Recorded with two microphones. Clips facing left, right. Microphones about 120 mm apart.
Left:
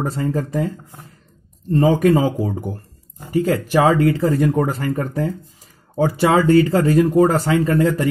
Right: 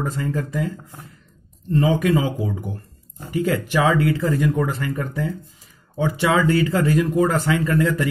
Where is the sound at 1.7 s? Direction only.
40° left (ahead or behind).